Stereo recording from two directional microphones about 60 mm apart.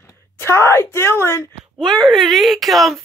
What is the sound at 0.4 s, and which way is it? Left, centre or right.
Speech, left.